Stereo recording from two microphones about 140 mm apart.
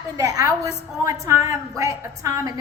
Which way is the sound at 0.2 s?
25° right (ahead or behind).